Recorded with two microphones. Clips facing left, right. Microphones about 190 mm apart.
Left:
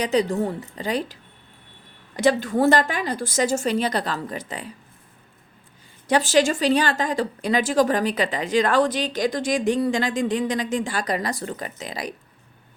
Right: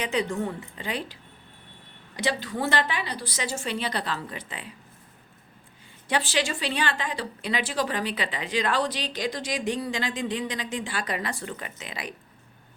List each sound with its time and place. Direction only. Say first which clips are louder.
0.0 s a woman's voice: left 6 dB; 40° left (ahead or behind)
6.1 s speech: left 8 dB; 45° left (ahead or behind)